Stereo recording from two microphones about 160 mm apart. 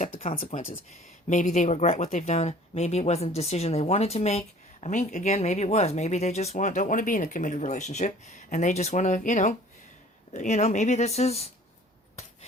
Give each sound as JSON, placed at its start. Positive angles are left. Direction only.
{"t": 0.1, "sound": "speech", "side_deg": 40}
{"t": 0.3, "sound": "speech", "side_deg": 55}